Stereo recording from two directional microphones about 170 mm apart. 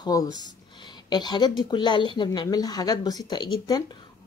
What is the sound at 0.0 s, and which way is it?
A woman's voice, 20° left (ahead or behind).